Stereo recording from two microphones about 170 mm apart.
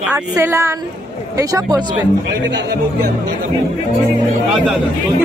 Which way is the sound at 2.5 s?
90° right.